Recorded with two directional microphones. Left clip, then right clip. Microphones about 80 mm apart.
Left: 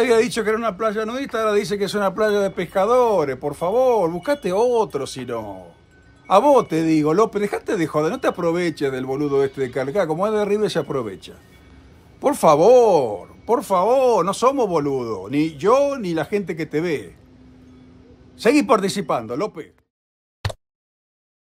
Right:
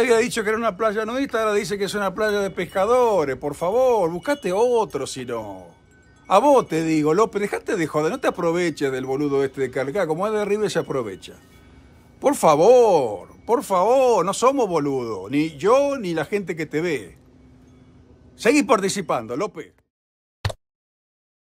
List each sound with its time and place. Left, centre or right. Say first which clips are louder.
0.0 s speech: left 1 dB; right
0.6 s speech: even; right
1.5 s speech: left 2 dB; right
18.4 s speech: left 1 dB; right
20.4 s a sound: even; centre